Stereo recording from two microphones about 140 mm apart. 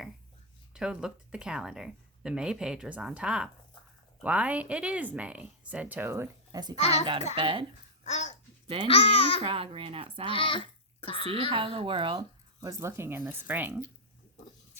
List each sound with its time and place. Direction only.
0.7 s speech: 5° right (ahead or behind)
6.7 s a child's voice: 50° left (ahead or behind)
7.3 s speech: 35° right (ahead or behind)
8.0 s a sound: 55° left (ahead or behind)
8.6 s a child's voice: 40° right (ahead or behind)
8.9 s speech: 40° left (ahead or behind)
9.4 s speech: 40° right (ahead or behind)
10.2 s goat: 40° left (ahead or behind)
11.3 s speech: 45° right (ahead or behind)
12.5 s speech: 20° right (ahead or behind)